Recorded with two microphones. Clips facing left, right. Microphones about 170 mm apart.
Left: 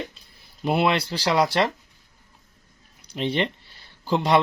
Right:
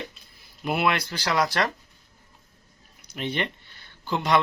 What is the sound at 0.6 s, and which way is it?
Speech, 30° left (ahead or behind).